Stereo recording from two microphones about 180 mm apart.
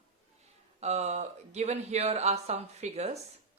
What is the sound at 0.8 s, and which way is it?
Speech, 40° right (ahead or behind).